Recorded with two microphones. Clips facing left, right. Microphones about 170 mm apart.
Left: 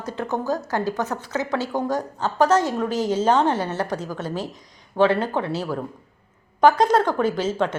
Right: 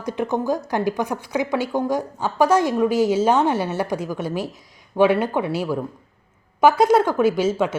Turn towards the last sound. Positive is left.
turn(degrees=-10)  # may be behind; listen again after turning